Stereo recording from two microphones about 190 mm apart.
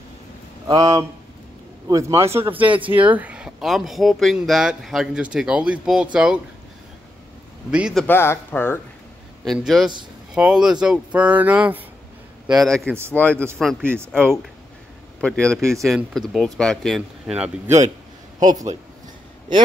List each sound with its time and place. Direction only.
0.7 s speech: 15° right (ahead or behind)
7.7 s speech: centre (ahead or behind)
9.4 s speech: centre (ahead or behind)
12.6 s speech: 5° left (ahead or behind)
13.8 s speech: 10° right (ahead or behind)
15.1 s a man's voice: 5° left (ahead or behind)
18.4 s a man's voice: 20° right (ahead or behind)